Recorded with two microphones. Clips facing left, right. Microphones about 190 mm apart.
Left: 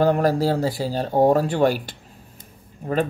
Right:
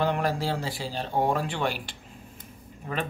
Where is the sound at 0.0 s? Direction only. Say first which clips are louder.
Left 8 dB; 40° left (ahead or behind).